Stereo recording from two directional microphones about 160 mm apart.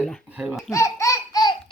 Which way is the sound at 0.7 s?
20° left (ahead or behind).